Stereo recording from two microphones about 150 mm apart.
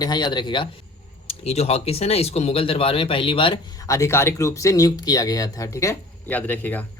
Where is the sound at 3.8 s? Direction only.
20° left (ahead or behind).